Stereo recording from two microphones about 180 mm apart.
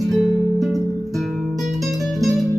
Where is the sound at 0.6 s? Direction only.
Centre (ahead or behind).